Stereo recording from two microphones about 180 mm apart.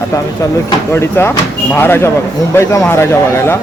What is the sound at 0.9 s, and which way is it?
Speech, 15° left (ahead or behind).